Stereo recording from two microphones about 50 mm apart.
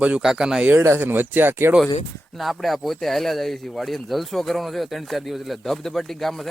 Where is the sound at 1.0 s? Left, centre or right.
Right.